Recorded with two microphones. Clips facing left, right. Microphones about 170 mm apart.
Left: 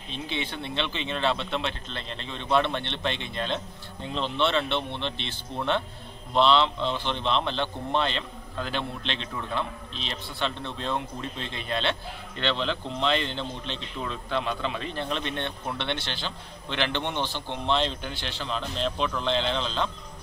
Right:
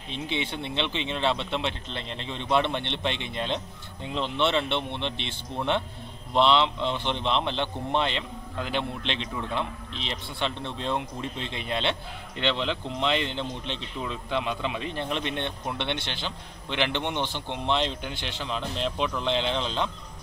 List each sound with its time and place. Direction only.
0.3 s speech: 20° right (ahead or behind)
6.3 s a man's voice: 20° right (ahead or behind)